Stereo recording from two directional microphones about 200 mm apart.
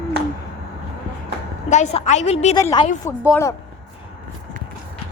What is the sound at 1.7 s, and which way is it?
Speech, 35° left (ahead or behind).